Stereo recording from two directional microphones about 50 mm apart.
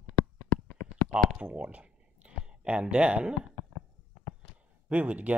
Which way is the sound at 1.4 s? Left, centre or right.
Right.